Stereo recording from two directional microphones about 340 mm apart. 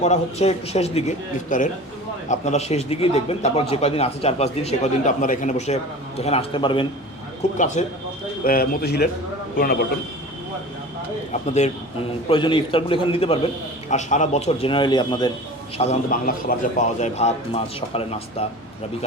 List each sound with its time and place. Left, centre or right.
0.0 s speech: centre
11.3 s speech: centre